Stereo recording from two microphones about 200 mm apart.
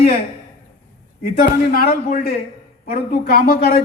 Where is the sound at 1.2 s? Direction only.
50° left (ahead or behind).